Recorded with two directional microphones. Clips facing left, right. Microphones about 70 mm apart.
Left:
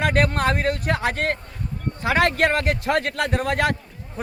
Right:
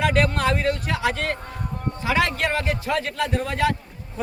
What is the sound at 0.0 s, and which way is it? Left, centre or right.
A man's voice, left.